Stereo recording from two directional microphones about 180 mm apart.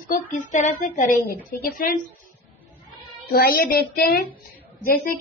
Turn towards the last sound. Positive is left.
turn(degrees=55)  # may be behind; listen again after turning